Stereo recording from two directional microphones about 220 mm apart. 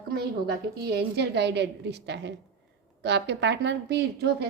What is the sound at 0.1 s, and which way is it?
A woman's voice, 45° right (ahead or behind).